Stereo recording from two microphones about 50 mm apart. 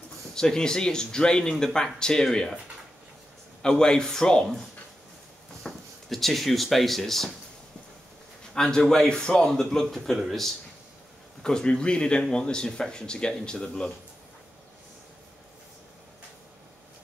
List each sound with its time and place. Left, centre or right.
0.3 s speech: centre
3.6 s speech: centre
8.5 s speech: centre
11.4 s speech: centre